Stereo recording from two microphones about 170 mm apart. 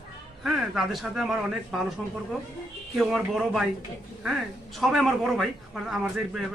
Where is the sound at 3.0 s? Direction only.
Centre (ahead or behind).